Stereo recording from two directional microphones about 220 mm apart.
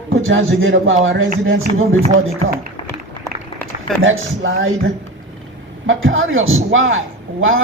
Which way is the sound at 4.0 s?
65° right (ahead or behind).